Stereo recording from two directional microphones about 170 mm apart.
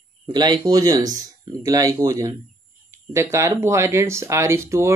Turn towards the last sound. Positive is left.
turn(degrees=-15)  # may be behind; listen again after turning